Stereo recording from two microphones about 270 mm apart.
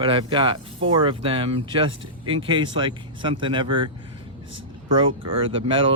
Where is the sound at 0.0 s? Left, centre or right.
Centre.